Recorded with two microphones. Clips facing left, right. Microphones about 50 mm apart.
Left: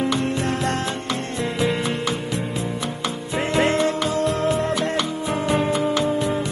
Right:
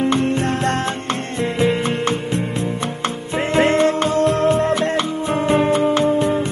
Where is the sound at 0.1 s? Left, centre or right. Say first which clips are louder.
Right 4 dB; right.